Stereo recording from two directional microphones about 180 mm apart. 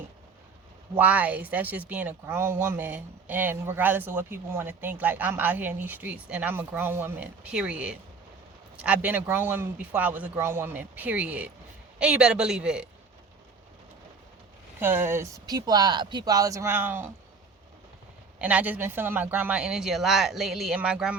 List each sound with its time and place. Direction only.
0.9 s a man's voice: 10° right (ahead or behind)
14.8 s speech: 10° right (ahead or behind)
18.3 s speech: 10° right (ahead or behind)